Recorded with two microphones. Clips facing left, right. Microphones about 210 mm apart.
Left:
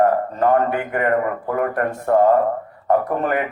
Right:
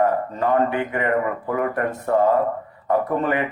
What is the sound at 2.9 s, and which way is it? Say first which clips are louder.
Speech: left 2 dB; 50° left (ahead or behind).